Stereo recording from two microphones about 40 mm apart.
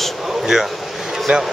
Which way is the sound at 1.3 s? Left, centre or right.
Right.